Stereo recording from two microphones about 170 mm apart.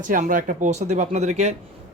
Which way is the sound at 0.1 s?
50° right (ahead or behind).